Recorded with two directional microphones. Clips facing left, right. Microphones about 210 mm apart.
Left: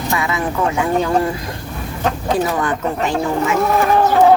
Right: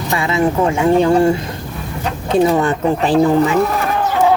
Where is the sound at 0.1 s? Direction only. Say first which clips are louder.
Right 6 dB; 25° right (ahead or behind).